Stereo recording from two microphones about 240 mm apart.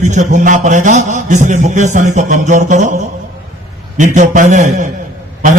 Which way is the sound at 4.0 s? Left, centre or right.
Right.